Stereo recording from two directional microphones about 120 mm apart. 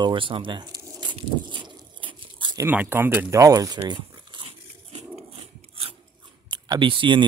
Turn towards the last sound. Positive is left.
turn(degrees=-45)  # may be behind; listen again after turning